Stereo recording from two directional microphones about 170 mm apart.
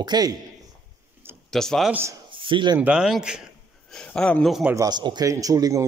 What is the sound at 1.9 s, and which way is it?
Speech, 10° right (ahead or behind).